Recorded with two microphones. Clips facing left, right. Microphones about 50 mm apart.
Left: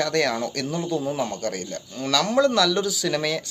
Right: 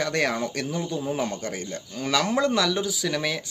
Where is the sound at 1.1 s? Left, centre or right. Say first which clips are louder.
Left 2 dB; right.